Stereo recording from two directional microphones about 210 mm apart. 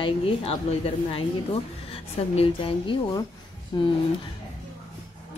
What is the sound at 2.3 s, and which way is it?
Speech, 25° left (ahead or behind).